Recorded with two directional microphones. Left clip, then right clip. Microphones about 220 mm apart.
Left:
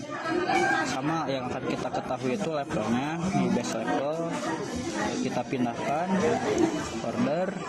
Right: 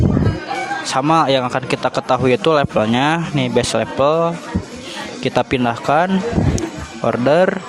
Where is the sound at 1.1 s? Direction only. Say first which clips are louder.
Right 16 dB; 45° right (ahead or behind).